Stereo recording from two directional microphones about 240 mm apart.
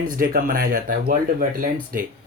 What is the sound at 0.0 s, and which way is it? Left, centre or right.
Speech, right.